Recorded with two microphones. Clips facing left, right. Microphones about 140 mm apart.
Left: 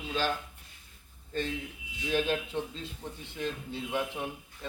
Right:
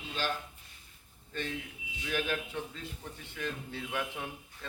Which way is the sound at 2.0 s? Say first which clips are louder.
Left 5 dB; 30° left (ahead or behind).